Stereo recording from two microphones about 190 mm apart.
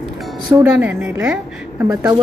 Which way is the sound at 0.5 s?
5° right (ahead or behind).